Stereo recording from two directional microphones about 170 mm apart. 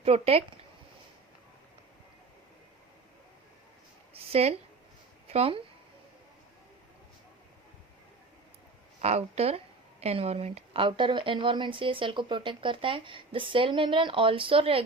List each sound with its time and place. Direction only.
0.0 s speech: 35° right (ahead or behind)
4.1 s a sound: 35° right (ahead or behind)
5.3 s speech: 35° right (ahead or behind)
9.0 s a woman's voice: 40° right (ahead or behind)